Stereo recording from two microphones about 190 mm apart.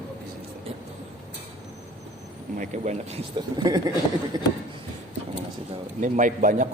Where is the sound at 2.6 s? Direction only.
40° right (ahead or behind).